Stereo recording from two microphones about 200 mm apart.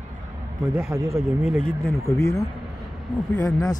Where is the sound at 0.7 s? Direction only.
15° right (ahead or behind).